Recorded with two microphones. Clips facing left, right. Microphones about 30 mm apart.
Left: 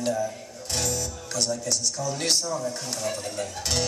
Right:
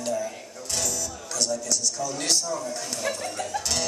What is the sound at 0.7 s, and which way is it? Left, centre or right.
Music, left.